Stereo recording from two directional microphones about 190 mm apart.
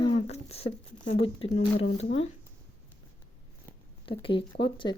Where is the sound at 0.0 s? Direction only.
30° left (ahead or behind).